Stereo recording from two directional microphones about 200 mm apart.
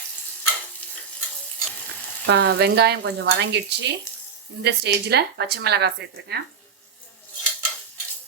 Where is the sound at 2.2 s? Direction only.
60° right (ahead or behind).